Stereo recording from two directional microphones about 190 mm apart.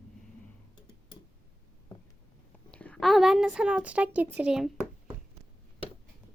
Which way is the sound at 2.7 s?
5° left (ahead or behind).